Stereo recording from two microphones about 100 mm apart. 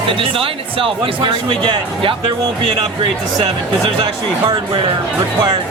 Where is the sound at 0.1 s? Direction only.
60° right (ahead or behind).